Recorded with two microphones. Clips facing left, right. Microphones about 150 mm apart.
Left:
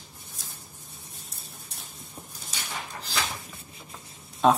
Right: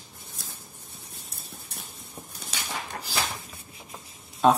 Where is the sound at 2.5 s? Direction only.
70° right (ahead or behind).